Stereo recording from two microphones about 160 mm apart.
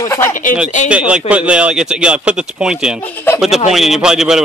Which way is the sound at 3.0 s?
10° left (ahead or behind).